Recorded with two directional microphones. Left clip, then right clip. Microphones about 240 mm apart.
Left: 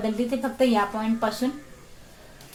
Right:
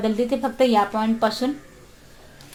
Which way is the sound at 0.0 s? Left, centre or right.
Right.